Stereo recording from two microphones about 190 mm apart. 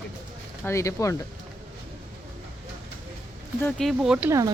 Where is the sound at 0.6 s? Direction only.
15° left (ahead or behind).